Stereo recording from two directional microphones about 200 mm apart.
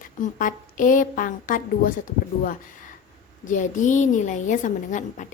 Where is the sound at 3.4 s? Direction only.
40° left (ahead or behind).